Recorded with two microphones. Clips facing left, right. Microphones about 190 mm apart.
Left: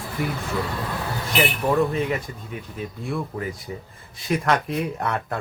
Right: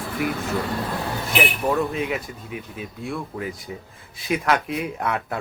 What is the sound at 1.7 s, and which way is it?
Speech, centre (ahead or behind).